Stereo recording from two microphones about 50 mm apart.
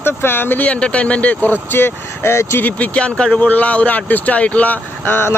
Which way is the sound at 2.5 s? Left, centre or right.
Left.